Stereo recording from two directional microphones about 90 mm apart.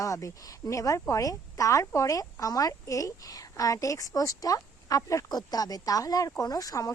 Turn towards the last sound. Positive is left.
turn(degrees=40)  # may be behind; listen again after turning